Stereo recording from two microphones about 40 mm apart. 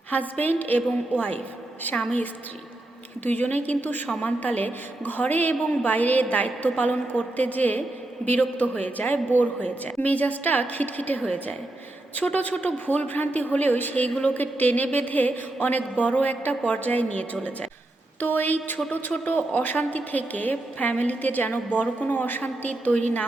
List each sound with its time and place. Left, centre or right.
0.1 s a woman's voice: left
0.8 s a woman's voice: left
1.9 s a woman's voice: left
3.2 s a woman's voice: left
12.3 s a woman's voice: left
18.2 s a woman's voice: left
22.7 s a woman's voice: left